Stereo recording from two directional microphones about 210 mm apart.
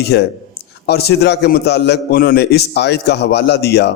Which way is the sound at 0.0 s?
50° left (ahead or behind).